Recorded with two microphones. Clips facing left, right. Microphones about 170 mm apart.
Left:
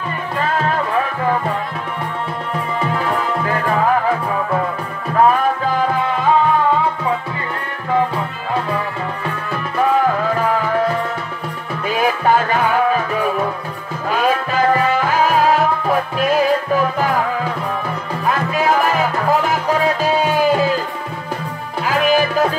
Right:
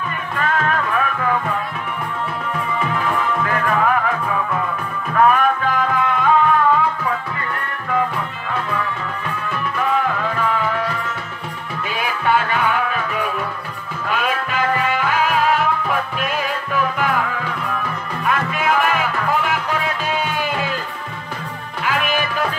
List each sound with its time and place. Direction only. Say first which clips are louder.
0.4 s music: left 1 dB; 30° left (ahead or behind)
3.4 s music: left 2 dB; 30° left (ahead or behind)
5.1 s music: left 1 dB; 30° left (ahead or behind)
10.3 s music: left 4 dB; 40° left (ahead or behind)
18.2 s music: left 3 dB; 35° left (ahead or behind)
21.8 s music: left 6 dB; 35° left (ahead or behind)